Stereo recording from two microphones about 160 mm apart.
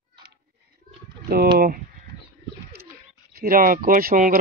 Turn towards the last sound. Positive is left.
turn(degrees=-65)  # may be behind; listen again after turning